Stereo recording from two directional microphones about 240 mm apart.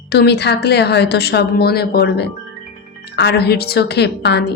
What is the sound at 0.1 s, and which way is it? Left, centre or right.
A woman's voice, left.